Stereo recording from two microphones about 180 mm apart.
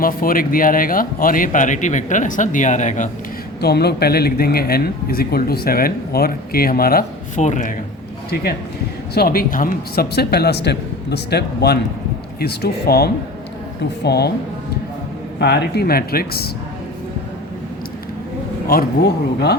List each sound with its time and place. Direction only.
0.0 s speech: 50° left (ahead or behind)
3.6 s speech: 65° left (ahead or behind); by 7.7 s 40° left (ahead or behind)
9.1 s a woman's voice: 55° left (ahead or behind)
15.4 s speech: 65° left (ahead or behind)
18.7 s speech: 60° left (ahead or behind)